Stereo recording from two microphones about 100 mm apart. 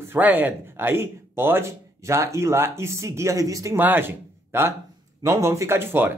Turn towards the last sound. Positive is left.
turn(degrees=-20)  # may be behind; listen again after turning